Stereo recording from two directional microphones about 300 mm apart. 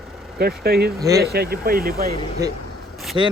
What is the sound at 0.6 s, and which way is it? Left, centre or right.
Speech, right.